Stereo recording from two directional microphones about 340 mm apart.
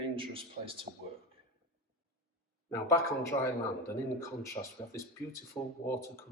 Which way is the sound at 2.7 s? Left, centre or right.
Centre.